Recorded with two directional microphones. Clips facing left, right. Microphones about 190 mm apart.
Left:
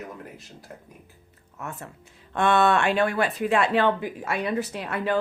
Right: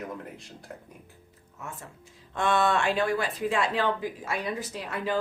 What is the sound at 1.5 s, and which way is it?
Speech, 65° left (ahead or behind).